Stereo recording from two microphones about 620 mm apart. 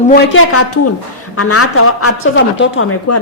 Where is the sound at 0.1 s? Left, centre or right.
Left.